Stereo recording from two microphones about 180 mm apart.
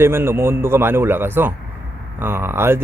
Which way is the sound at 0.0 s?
15° right (ahead or behind).